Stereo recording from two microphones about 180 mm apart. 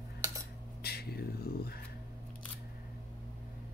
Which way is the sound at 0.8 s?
60° left (ahead or behind).